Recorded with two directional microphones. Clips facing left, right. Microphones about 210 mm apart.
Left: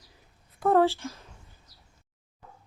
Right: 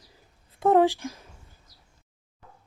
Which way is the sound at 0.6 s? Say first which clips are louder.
Right 2 dB; 15° right (ahead or behind).